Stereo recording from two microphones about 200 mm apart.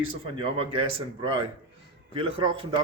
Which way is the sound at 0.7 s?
25° right (ahead or behind).